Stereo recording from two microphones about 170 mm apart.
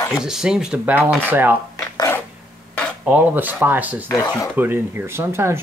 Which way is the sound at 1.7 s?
20° left (ahead or behind).